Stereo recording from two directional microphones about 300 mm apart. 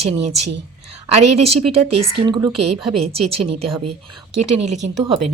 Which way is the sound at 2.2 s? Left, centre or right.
Centre.